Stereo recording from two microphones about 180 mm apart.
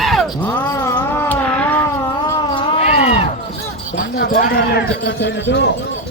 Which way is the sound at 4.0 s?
55° left (ahead or behind).